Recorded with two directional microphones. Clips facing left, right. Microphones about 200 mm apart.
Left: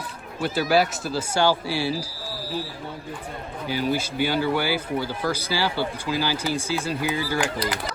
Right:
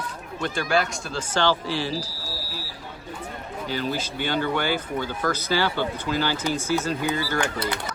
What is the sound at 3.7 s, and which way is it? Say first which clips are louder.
Speech: left 3 dB; 10° left (ahead or behind).